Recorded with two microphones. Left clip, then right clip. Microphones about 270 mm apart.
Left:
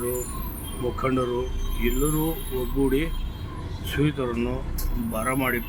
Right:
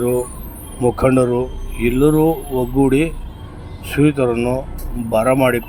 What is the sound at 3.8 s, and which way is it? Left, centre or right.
Speech, centre.